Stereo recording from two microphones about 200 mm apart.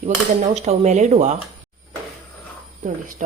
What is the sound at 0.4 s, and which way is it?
Speech, 35° right (ahead or behind).